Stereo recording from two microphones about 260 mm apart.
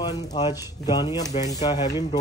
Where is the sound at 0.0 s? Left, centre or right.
Centre.